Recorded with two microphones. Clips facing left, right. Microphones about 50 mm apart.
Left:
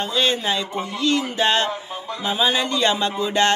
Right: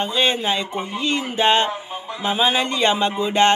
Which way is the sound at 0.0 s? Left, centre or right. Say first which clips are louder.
Right 1 dB; right.